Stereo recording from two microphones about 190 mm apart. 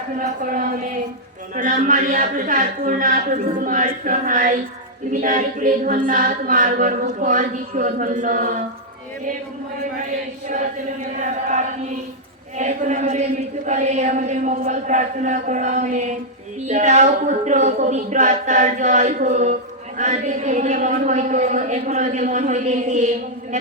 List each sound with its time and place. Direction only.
1.5 s a capella: 45° right (ahead or behind)
11.2 s a man's voice: 40° right (ahead or behind)